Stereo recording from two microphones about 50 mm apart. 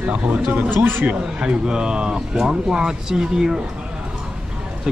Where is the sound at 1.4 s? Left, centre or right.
Centre.